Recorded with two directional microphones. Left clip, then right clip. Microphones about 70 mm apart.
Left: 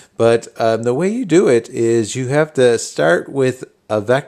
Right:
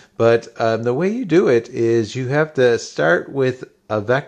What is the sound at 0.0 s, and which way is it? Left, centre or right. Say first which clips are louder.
Speech: left 1 dB; left.